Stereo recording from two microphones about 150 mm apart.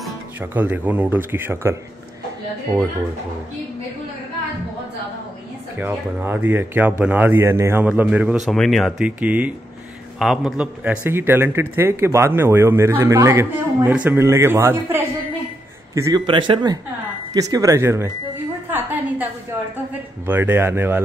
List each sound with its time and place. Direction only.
0.4 s speech: 10° right (ahead or behind)
5.8 s speech: 15° right (ahead or behind)
8.5 s a man's voice: centre (ahead or behind); by 16.2 s 20° right (ahead or behind)
16.3 s speech: 30° right (ahead or behind)
20.2 s speech: 15° right (ahead or behind)